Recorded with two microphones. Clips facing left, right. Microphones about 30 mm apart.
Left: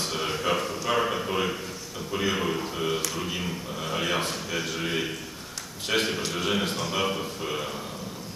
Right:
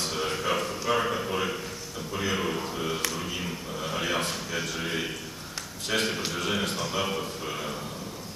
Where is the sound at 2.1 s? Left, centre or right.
Centre.